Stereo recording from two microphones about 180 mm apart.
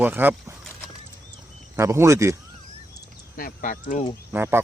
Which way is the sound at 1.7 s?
15° right (ahead or behind).